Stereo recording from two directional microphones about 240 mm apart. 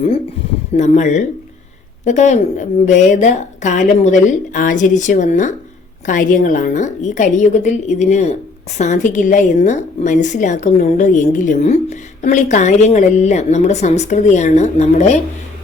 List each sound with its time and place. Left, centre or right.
0.8 s a woman's voice: left